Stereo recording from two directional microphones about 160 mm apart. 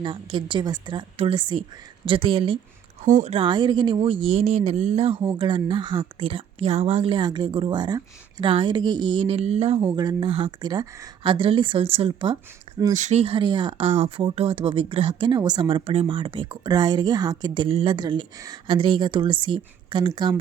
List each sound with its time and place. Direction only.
0.0 s speech: 30° right (ahead or behind)
9.9 s speech: 25° right (ahead or behind)
11.2 s speech: 35° right (ahead or behind)
12.9 s speech: 45° right (ahead or behind); by 20.4 s 30° right (ahead or behind)